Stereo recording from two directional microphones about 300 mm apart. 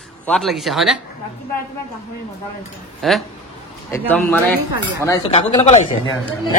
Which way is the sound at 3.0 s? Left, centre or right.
Centre.